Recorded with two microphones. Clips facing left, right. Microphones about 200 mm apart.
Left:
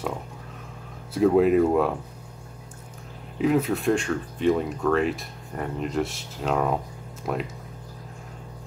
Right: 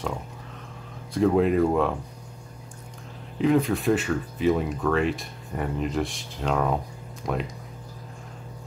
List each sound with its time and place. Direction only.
1.1 s speech: 5° left (ahead or behind)
3.3 s speech: 5° left (ahead or behind)